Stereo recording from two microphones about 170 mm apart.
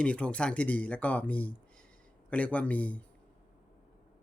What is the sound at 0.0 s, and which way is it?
Speech, 5° left (ahead or behind).